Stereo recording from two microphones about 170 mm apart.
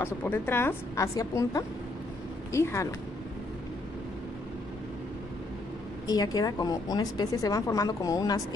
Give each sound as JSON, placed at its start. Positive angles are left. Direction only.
{"t": 0.0, "sound": "a woman's voice", "side_deg": 10}
{"t": 6.0, "sound": "speech", "side_deg": 20}